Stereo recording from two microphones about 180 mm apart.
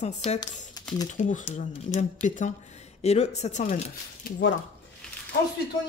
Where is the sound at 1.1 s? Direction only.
40° left (ahead or behind).